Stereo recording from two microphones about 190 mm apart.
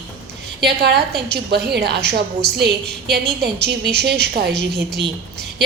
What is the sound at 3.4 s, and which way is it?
A woman's voice, 60° right (ahead or behind).